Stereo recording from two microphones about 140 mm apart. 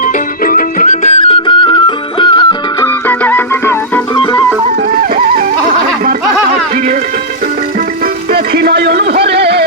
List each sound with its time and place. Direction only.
0.0 s music: 85° left; by 2.6 s 35° left (ahead or behind)
2.8 s music: 15° left (ahead or behind)
4.1 s music: 35° left (ahead or behind)
5.1 s music: 90° right
8.0 s music: 90° right